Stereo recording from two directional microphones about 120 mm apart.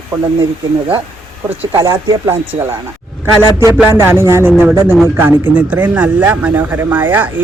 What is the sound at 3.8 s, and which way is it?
A man's voice, 20° right (ahead or behind).